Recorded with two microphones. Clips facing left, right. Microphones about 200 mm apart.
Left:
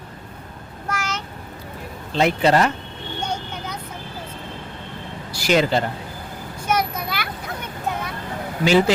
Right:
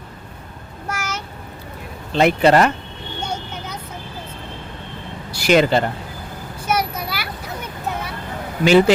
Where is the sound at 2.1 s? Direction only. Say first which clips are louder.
Right 3 dB; 60° right (ahead or behind).